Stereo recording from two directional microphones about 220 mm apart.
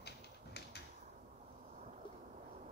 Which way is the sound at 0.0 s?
50° left (ahead or behind).